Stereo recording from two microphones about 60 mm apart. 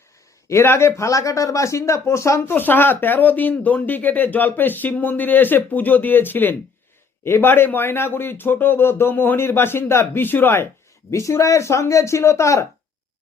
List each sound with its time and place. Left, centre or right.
0.4 s speech: left
2.5 s speech: left
11.1 s speech: left